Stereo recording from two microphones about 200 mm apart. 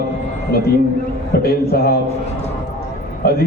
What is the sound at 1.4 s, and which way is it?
Speech, 50° left (ahead or behind).